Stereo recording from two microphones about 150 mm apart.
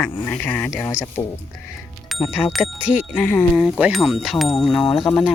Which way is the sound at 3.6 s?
5° right (ahead or behind).